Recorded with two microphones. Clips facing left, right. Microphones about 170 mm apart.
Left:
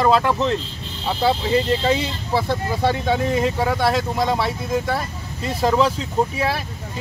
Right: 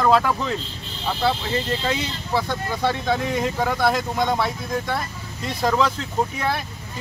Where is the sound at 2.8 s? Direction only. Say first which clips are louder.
Left 2 dB; 5° left (ahead or behind).